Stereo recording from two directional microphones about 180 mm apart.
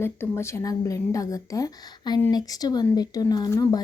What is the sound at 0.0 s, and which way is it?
Speech, 15° left (ahead or behind).